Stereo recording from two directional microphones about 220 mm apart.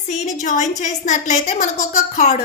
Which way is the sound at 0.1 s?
35° left (ahead or behind).